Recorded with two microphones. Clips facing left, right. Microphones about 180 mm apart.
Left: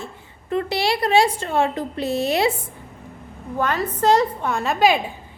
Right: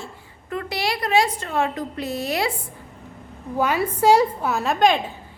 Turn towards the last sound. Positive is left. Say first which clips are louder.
# even
turn(degrees=5)  # may be behind; listen again after turning